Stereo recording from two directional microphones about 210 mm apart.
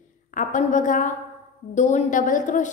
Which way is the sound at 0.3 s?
40° left (ahead or behind).